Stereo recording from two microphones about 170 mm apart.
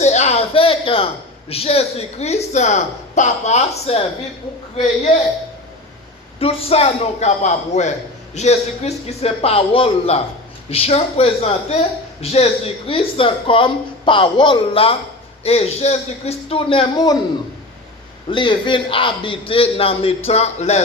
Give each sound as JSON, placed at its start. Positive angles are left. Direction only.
{"t": 0.0, "sound": "a sound", "side_deg": 40}
{"t": 3.2, "sound": "a man's voice", "side_deg": 45}
{"t": 6.4, "sound": "a woman's voice", "side_deg": 35}
{"t": 18.3, "sound": "a woman's voice", "side_deg": 30}